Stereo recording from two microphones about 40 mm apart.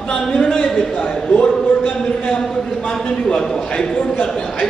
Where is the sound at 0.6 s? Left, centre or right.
Centre.